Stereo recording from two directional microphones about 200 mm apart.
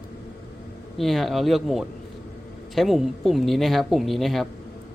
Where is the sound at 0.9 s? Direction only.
Centre (ahead or behind).